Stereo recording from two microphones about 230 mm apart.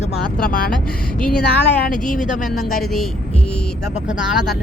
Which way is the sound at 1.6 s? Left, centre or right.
Left.